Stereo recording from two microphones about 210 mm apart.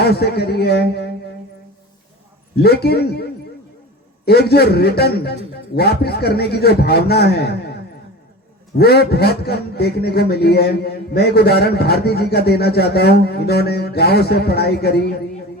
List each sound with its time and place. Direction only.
0.0 s a man's voice: 50° left (ahead or behind)
2.6 s a man's voice: 50° left (ahead or behind)
4.3 s a man's voice: 50° left (ahead or behind)